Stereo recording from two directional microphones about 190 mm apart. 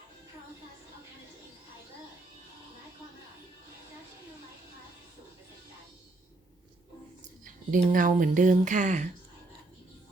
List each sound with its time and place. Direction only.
7.4 s speech: 45° right (ahead or behind)